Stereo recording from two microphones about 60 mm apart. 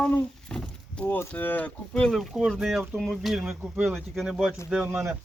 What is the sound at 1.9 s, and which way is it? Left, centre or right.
Speech, centre.